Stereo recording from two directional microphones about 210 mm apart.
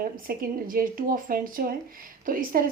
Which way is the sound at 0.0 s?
45° right (ahead or behind).